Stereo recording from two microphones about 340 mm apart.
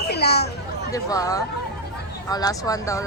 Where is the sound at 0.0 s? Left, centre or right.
Left.